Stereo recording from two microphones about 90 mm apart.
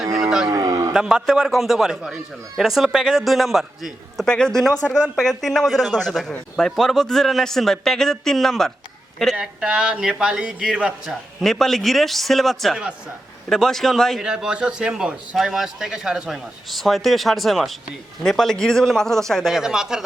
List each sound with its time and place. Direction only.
0.1 s a sound: 5° right (ahead or behind)
0.5 s a sound: 40° right (ahead or behind)
0.9 s speech: 5° right (ahead or behind)
9.4 s a man's voice: 10° right (ahead or behind)
11.1 s speech: centre (ahead or behind)
14.2 s a man's voice: 5° right (ahead or behind)